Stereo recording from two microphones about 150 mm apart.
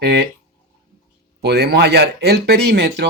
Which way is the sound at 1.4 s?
90° right.